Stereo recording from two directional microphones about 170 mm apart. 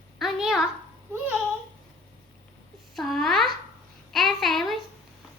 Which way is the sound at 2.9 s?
Centre (ahead or behind).